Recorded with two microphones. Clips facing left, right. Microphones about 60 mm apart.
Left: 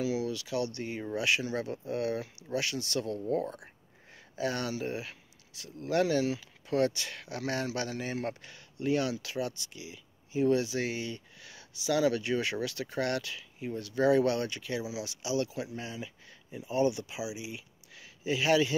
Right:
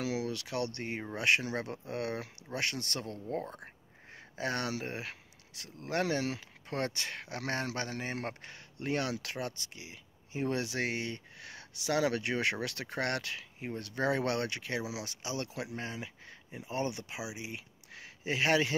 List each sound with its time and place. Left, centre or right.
0.0 s speech: right
3.1 s speech: right
4.4 s speech: right